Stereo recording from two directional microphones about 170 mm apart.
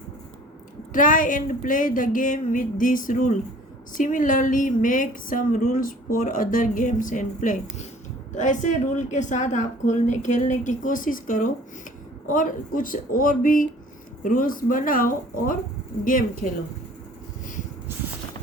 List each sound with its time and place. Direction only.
0.9 s a woman's voice: 50° left (ahead or behind)